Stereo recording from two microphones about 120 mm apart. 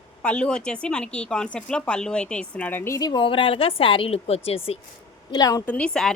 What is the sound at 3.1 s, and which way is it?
A woman's voice, 45° left (ahead or behind).